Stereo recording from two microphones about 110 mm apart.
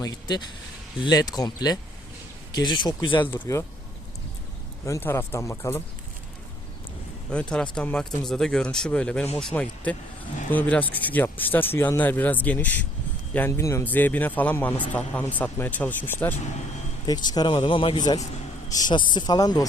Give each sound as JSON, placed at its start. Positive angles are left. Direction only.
{"t": 0.0, "sound": "a woman's voice", "side_deg": 35}
{"t": 3.3, "sound": "speech", "side_deg": 25}
{"t": 4.9, "sound": "speech", "side_deg": 20}
{"t": 7.3, "sound": "speech", "side_deg": 10}
{"t": 13.6, "sound": "speech", "side_deg": 25}
{"t": 13.8, "sound": "speech", "side_deg": 15}
{"t": 17.1, "sound": "a woman's voice", "side_deg": 40}
{"t": 17.5, "sound": "a woman's voice", "side_deg": 55}